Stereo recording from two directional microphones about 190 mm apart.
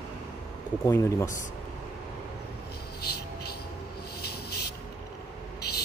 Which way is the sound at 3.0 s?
55° left (ahead or behind).